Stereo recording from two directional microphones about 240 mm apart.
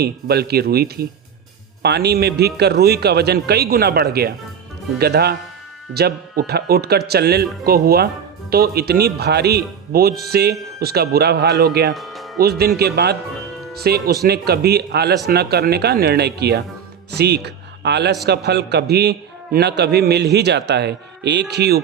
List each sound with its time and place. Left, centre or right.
0.0 s speech: right
11.9 s music: centre
12.4 s a man's voice: right